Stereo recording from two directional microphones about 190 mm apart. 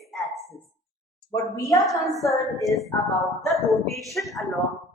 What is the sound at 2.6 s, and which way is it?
Speech, centre (ahead or behind).